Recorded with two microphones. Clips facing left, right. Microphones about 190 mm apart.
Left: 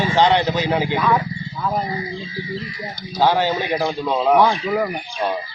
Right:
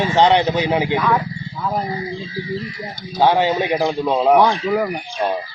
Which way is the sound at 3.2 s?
15° right (ahead or behind).